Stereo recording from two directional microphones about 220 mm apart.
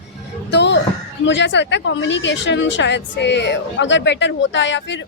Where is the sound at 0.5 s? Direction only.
50° left (ahead or behind).